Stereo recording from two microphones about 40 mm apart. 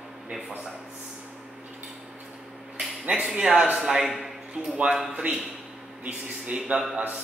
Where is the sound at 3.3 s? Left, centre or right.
Right.